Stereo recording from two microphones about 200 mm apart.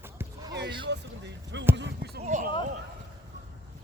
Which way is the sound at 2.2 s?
40° right (ahead or behind).